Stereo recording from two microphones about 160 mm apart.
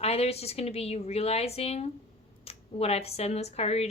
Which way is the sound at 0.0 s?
40° left (ahead or behind).